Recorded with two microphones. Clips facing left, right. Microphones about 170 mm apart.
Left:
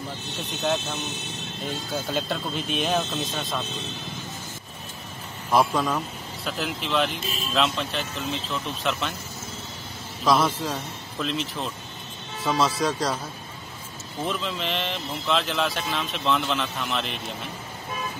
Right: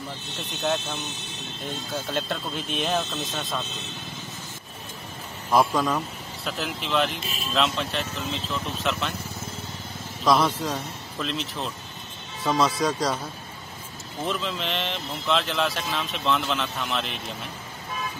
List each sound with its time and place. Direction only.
2.0 s speech: centre (ahead or behind)
5.5 s speech: centre (ahead or behind)
10.2 s speech: centre (ahead or behind)
14.2 s speech: centre (ahead or behind)